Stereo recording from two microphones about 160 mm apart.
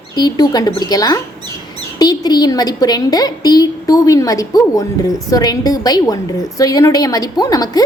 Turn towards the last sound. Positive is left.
turn(degrees=25)  # may be behind; listen again after turning